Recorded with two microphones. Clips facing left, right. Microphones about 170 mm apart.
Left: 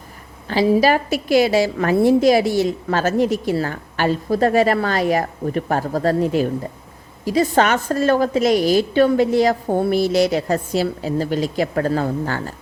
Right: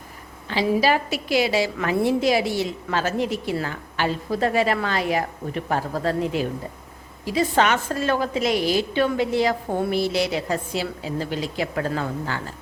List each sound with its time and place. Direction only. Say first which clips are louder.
0.4 s a woman's voice: left 5 dB; 45° left (ahead or behind)